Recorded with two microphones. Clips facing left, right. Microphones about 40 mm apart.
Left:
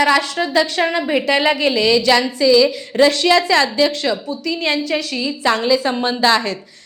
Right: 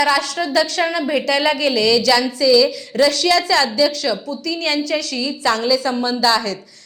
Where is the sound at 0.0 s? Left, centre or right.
Left.